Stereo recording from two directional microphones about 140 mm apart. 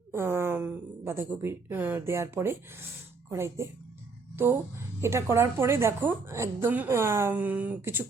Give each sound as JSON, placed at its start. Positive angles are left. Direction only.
{"t": 0.1, "sound": "speech", "side_deg": -20}
{"t": 4.9, "sound": "a woman's voice", "side_deg": -20}